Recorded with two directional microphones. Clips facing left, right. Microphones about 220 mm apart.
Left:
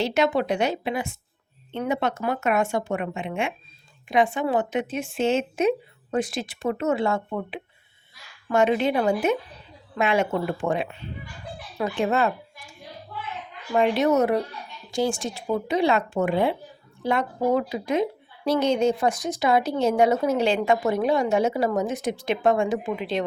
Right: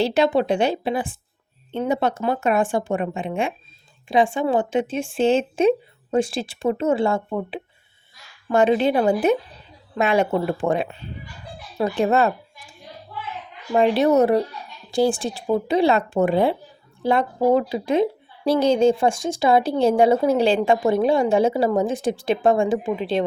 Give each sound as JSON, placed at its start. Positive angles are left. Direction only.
{"t": 0.0, "sound": "a woman's voice", "side_deg": -30}
{"t": 13.7, "sound": "a woman's voice", "side_deg": -35}